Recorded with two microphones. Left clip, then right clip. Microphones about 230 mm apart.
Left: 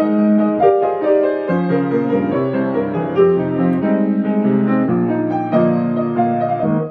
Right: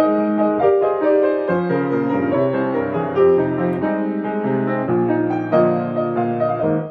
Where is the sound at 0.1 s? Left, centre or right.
Right.